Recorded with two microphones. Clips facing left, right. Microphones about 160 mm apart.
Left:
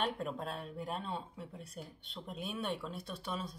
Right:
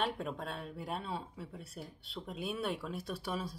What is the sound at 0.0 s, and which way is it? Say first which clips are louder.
Speech: even; centre (ahead or behind).